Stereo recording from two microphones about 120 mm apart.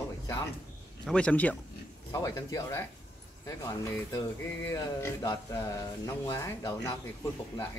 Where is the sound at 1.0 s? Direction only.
10° left (ahead or behind).